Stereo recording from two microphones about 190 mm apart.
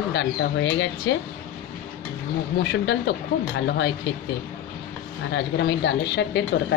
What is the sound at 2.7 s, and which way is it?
A woman's voice, 70° left (ahead or behind).